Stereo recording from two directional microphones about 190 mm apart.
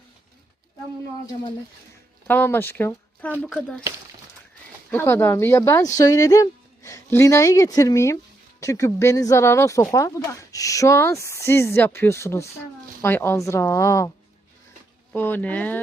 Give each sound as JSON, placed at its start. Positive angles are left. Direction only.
{"t": 2.2, "sound": "speech", "side_deg": 10}
{"t": 4.9, "sound": "speech", "side_deg": 10}
{"t": 15.1, "sound": "speech", "side_deg": 10}